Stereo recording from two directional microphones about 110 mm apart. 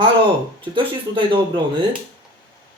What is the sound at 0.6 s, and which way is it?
Speech, 50° right (ahead or behind).